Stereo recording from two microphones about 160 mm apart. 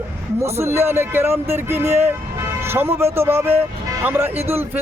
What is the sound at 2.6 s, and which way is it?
Vehicle, 15° right (ahead or behind).